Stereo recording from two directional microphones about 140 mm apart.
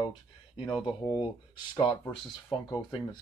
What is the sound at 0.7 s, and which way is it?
Speech, 35° left (ahead or behind).